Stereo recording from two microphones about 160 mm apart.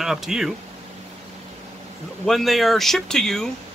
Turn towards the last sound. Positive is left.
turn(degrees=5)  # may be behind; listen again after turning